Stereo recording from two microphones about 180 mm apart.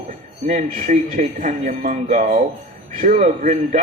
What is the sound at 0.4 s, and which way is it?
A man's voice, 45° right (ahead or behind).